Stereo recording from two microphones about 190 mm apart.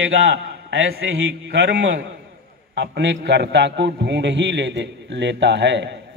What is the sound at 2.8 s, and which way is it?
A man's voice, 70° right (ahead or behind).